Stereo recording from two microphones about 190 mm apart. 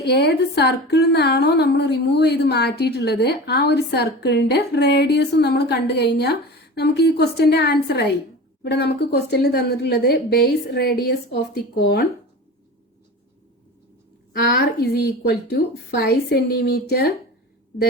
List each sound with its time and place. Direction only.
0.0 s a woman's voice: 60° left (ahead or behind)
14.3 s a woman's voice: 55° left (ahead or behind)